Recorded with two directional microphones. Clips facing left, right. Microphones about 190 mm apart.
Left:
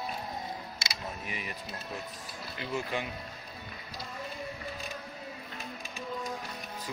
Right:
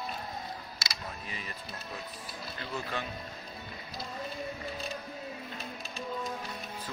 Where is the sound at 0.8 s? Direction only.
15° left (ahead or behind).